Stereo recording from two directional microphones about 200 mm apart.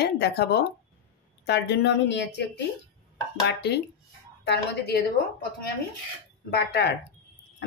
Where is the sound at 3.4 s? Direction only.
55° left (ahead or behind).